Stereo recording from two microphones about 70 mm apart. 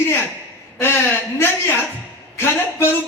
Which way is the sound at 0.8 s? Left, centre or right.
Left.